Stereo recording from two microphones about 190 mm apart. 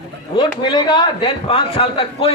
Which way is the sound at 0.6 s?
25° left (ahead or behind).